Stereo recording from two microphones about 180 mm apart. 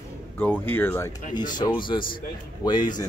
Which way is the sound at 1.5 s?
25° left (ahead or behind).